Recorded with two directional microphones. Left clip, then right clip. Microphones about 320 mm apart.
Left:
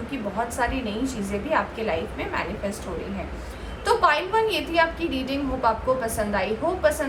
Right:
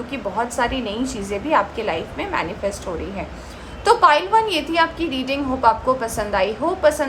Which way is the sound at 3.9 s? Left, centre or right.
Right.